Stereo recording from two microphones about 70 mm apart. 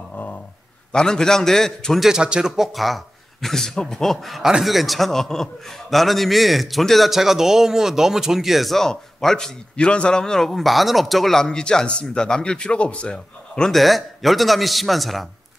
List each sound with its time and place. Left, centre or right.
0.1 s a sound: left
0.9 s a man's voice: centre
2.0 s a man's voice: centre
13.7 s a man's voice: centre